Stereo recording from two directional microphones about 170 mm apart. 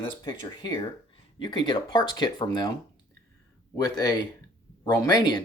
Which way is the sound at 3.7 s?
20° left (ahead or behind).